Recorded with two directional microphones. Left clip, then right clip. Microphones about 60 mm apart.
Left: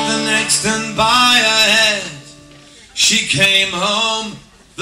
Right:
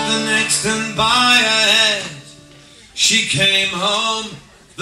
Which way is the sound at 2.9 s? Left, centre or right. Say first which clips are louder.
Left 1 dB; centre.